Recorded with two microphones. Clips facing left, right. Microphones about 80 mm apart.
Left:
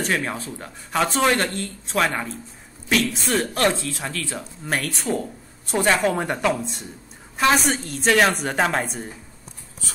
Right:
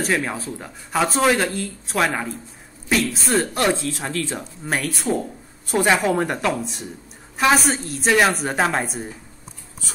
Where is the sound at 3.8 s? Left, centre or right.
Right.